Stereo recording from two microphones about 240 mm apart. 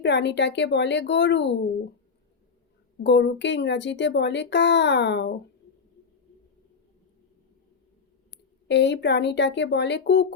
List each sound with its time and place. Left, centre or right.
0.0 s speech: left
3.0 s speech: left
8.6 s speech: left